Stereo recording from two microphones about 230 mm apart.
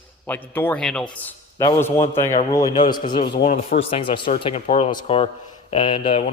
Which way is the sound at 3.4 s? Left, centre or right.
Left.